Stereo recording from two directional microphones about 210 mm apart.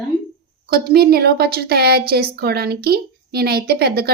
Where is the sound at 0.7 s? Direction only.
45° right (ahead or behind).